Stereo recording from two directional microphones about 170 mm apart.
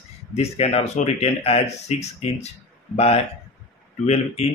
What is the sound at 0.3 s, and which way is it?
Speech, 40° left (ahead or behind).